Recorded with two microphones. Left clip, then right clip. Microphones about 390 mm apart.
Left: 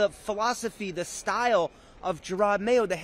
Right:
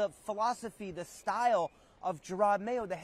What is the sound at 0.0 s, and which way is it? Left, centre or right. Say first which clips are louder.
Speech: left 6 dB; centre.